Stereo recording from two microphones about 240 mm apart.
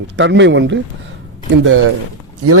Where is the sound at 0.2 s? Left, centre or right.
Right.